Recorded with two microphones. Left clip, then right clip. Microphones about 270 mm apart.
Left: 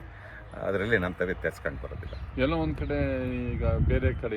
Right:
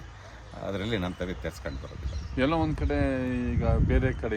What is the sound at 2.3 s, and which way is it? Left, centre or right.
Speech, right.